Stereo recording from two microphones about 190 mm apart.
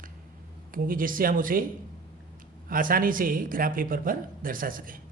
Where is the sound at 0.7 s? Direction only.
45° right (ahead or behind).